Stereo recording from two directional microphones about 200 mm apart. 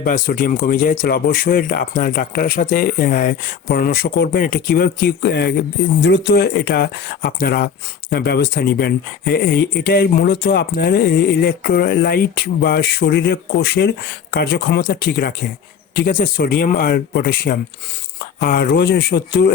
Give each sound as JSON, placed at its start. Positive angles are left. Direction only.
{"t": 0.0, "sound": "speech", "side_deg": 45}